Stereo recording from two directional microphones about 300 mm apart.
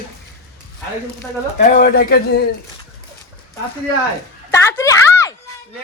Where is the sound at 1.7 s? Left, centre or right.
Left.